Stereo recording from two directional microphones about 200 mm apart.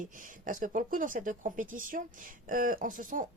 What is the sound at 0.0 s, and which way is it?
Speech, 40° right (ahead or behind).